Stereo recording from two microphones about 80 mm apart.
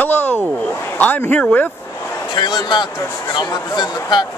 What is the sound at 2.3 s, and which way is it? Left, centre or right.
Speech, left.